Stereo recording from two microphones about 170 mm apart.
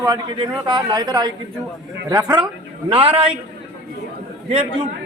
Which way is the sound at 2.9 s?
35° right (ahead or behind).